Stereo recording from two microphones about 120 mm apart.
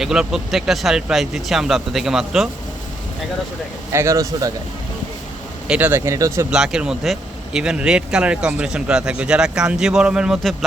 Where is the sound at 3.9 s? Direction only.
25° right (ahead or behind).